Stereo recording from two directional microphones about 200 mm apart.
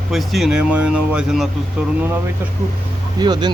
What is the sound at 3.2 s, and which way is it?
Speech, 20° right (ahead or behind).